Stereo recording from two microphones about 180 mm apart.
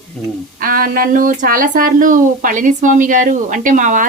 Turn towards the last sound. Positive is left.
turn(degrees=-45)  # may be behind; listen again after turning